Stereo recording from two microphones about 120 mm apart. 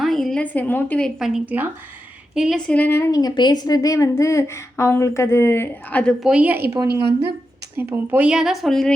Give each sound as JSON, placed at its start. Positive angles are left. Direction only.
{"t": 0.0, "sound": "a woman's voice", "side_deg": 0}
{"t": 1.2, "sound": "speech", "side_deg": -10}
{"t": 2.6, "sound": "a woman's voice", "side_deg": 15}
{"t": 6.1, "sound": "speech", "side_deg": -5}
{"t": 6.7, "sound": "a woman's voice", "side_deg": -30}
{"t": 7.8, "sound": "speech", "side_deg": -15}